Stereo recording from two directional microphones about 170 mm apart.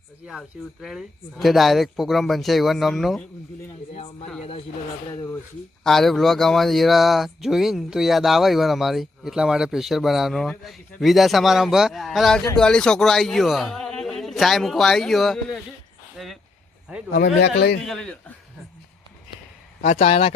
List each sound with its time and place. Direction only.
0.3 s speech: centre (ahead or behind)
3.9 s speech: 40° left (ahead or behind)
5.8 s speech: centre (ahead or behind)
16.1 s a sound: centre (ahead or behind)
17.1 s speech: 80° left
17.8 s speech: 5° left (ahead or behind)
19.8 s speech: 40° left (ahead or behind)